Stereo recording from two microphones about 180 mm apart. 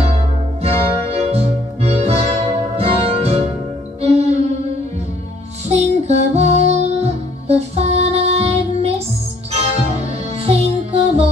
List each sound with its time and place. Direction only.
0.6 s music: 35° right (ahead or behind)
5.7 s music: 40° right (ahead or behind)
10.4 s music: 35° right (ahead or behind)